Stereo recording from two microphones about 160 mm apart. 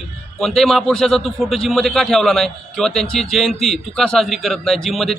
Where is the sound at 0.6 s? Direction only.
Centre (ahead or behind).